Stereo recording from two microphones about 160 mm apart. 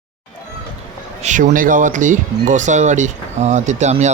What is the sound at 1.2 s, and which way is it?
Speech, 50° right (ahead or behind).